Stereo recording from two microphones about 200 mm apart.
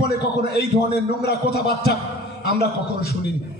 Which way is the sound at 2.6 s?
50° left (ahead or behind).